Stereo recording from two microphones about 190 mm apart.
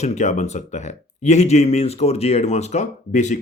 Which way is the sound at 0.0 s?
35° left (ahead or behind).